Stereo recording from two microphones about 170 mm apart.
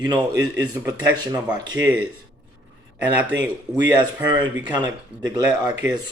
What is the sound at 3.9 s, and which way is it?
Speech, 25° right (ahead or behind).